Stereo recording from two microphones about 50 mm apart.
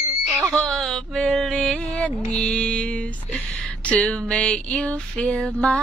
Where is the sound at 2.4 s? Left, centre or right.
Left.